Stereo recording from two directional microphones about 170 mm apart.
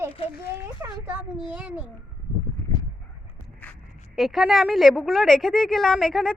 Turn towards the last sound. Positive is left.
turn(degrees=0)  # may be behind; listen again after turning